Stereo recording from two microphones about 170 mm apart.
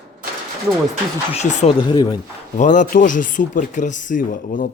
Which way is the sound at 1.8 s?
25° left (ahead or behind).